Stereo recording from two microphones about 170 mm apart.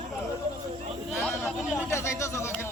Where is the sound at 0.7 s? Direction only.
35° right (ahead or behind).